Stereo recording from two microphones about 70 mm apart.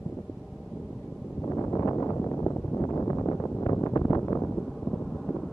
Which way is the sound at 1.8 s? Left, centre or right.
Left.